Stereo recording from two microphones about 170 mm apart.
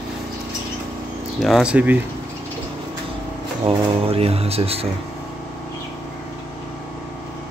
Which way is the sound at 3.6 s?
35° right (ahead or behind).